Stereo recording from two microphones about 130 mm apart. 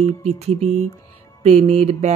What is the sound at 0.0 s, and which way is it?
Speech, 55° right (ahead or behind).